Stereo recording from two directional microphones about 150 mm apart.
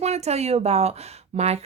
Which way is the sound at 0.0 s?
45° right (ahead or behind).